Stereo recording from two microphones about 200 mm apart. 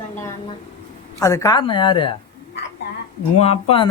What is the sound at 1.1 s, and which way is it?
Speech, 15° left (ahead or behind).